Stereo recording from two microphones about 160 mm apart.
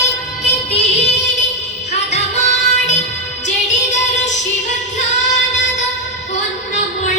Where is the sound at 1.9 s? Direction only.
45° left (ahead or behind).